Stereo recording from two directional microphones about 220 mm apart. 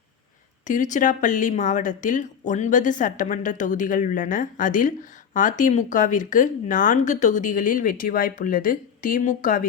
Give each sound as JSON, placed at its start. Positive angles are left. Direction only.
{"t": 0.7, "sound": "speech", "side_deg": 35}